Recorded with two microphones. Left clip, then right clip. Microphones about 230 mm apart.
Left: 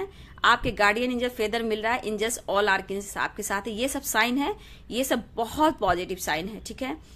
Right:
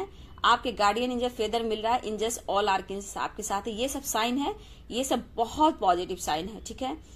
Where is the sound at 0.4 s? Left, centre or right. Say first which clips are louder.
Left 2 dB; left.